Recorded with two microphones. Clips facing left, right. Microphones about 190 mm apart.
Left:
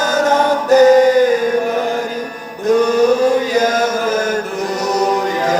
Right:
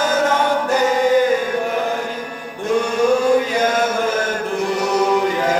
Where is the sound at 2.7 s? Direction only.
40° left (ahead or behind).